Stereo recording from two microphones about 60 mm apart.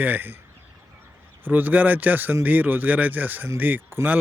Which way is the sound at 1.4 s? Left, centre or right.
Right.